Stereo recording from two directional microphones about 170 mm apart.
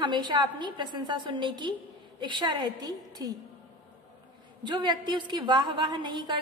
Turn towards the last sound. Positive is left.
turn(degrees=-25)  # may be behind; listen again after turning